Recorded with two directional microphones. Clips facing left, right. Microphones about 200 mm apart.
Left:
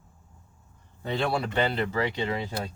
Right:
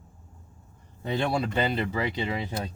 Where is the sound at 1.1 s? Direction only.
20° right (ahead or behind).